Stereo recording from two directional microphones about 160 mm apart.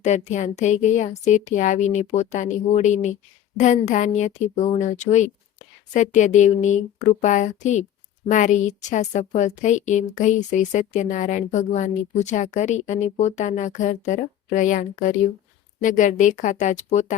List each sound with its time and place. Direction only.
0.0 s a woman's voice: 45° left (ahead or behind)